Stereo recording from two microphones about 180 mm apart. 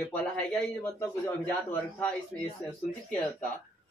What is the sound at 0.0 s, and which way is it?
A man's voice, 10° left (ahead or behind).